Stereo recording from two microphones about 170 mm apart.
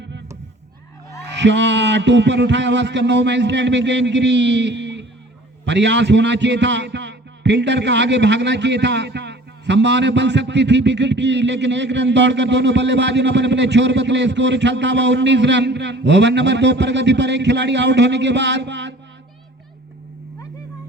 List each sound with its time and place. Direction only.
1.4 s a man's voice: 90° right